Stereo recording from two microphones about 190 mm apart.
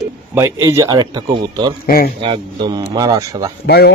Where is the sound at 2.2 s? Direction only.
25° right (ahead or behind).